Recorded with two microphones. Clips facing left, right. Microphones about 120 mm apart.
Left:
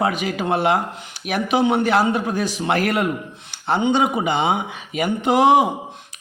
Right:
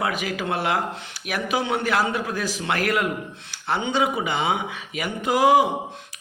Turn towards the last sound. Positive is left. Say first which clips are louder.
# left 3 dB
turn(degrees=25)  # may be behind; listen again after turning